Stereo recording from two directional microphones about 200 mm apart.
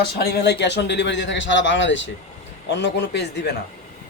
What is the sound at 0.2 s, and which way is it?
A man's voice, 55° left (ahead or behind).